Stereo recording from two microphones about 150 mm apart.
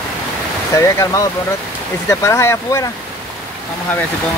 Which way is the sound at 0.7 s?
20° left (ahead or behind).